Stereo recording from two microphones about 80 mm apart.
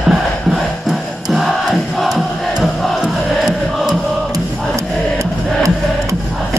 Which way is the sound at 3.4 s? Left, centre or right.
Centre.